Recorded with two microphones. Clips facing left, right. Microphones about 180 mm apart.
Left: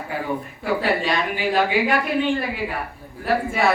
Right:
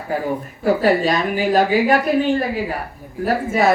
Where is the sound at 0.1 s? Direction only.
40° right (ahead or behind).